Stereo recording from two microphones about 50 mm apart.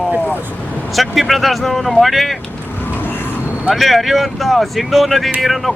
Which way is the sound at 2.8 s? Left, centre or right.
Left.